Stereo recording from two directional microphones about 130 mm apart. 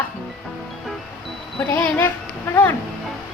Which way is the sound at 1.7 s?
15° left (ahead or behind).